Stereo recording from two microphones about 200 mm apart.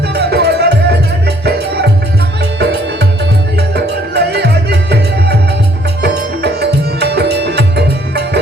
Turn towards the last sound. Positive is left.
turn(degrees=-55)  # may be behind; listen again after turning